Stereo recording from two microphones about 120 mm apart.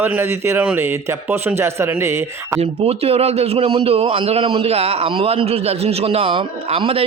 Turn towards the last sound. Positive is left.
turn(degrees=-55)  # may be behind; listen again after turning